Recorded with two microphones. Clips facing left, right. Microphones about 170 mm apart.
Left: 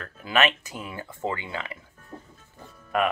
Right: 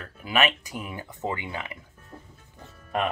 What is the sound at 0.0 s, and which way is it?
Speech, 10° right (ahead or behind).